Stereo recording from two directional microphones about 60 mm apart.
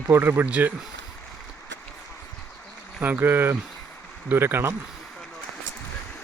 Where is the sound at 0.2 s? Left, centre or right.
Right.